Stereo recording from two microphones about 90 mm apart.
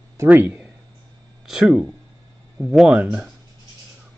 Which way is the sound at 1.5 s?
5° right (ahead or behind).